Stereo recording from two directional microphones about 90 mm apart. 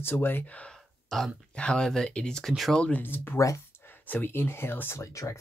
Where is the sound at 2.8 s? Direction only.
20° left (ahead or behind).